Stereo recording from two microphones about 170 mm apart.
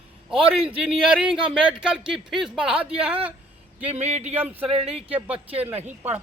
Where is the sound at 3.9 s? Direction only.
40° right (ahead or behind).